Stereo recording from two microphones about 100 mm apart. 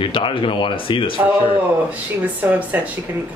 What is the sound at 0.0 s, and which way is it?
Speech, 55° left (ahead or behind).